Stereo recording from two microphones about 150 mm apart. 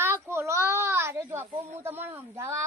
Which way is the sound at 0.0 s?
15° right (ahead or behind).